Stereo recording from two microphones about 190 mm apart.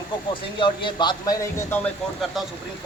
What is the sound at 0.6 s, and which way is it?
A man's voice, 25° left (ahead or behind).